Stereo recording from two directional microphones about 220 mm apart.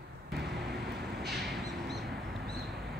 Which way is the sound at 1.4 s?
Centre (ahead or behind).